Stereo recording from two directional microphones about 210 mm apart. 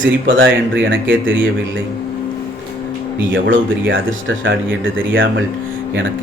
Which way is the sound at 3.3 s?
65° right (ahead or behind).